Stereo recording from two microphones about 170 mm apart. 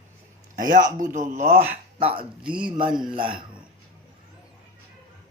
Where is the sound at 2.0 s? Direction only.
35° right (ahead or behind).